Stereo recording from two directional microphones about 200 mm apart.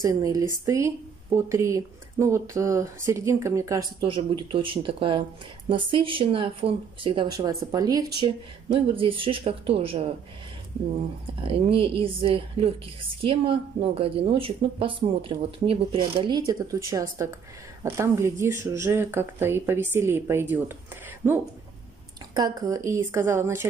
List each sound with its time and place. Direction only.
0.0 s a woman's voice: 15° right (ahead or behind)
11.4 s a woman's voice: 30° right (ahead or behind); by 21.4 s 10° right (ahead or behind)
22.3 s speech: 20° right (ahead or behind)